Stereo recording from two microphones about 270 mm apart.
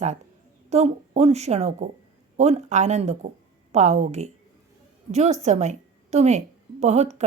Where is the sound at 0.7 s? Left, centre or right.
Right.